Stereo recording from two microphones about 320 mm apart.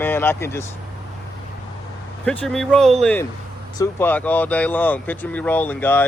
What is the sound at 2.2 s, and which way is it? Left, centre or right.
Speech, centre.